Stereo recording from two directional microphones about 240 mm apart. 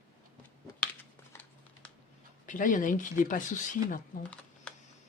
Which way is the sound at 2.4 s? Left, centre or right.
Left.